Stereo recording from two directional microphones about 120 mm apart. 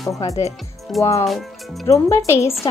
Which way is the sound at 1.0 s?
25° left (ahead or behind).